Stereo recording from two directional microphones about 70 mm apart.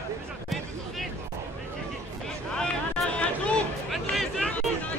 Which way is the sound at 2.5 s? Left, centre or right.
Centre.